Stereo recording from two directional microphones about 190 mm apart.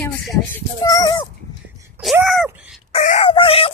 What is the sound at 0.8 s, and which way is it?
Speech, 20° left (ahead or behind).